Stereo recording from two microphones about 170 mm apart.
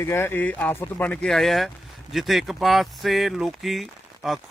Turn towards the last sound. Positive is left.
turn(degrees=0)  # may be behind; listen again after turning